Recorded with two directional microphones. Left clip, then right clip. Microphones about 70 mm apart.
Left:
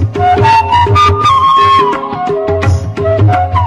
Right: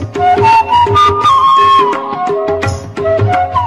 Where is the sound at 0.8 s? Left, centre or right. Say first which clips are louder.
Even; left.